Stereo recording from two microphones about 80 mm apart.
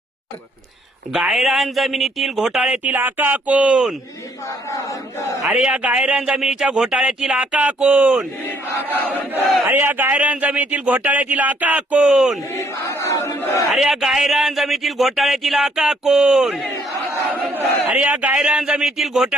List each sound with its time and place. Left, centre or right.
1.1 s speech: centre
2.7 s speech: right
5.5 s speech: centre
8.9 s crowd: left
9.6 s speech: right
12.5 s crowd: left
13.7 s speech: centre
17.5 s speech: right; by 19.4 s centre